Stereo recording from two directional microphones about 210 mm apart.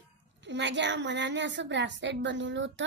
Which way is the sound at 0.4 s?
55° right (ahead or behind).